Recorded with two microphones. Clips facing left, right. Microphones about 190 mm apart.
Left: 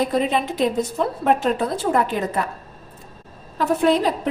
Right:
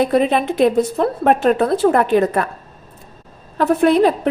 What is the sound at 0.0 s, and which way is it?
A woman's voice, 65° right (ahead or behind).